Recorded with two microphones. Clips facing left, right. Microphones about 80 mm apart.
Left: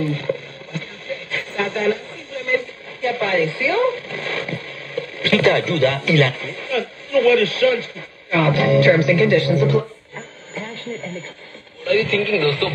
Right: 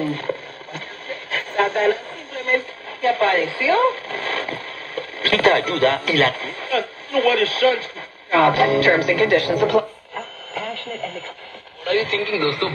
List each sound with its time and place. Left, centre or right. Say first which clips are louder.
0.0 s speech: left 1 dB; right
1.3 s speech: right 4 dB; right
9.8 s radio: right 2 dB; right
11.8 s speech: left 2 dB; right
12.1 s speech: left 3 dB; right